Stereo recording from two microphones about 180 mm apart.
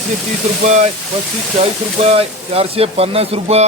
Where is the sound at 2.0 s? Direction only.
35° right (ahead or behind).